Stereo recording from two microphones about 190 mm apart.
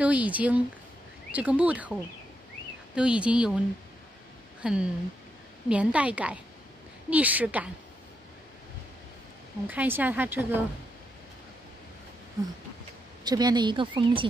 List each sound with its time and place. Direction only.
0.0 s a woman's voice: 5° right (ahead or behind)
3.0 s a woman's voice: 5° right (ahead or behind)
9.7 s a woman's voice: 10° right (ahead or behind)
13.2 s a woman's voice: 20° right (ahead or behind)